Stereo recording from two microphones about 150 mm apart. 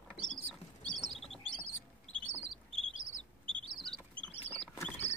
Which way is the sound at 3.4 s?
35° right (ahead or behind).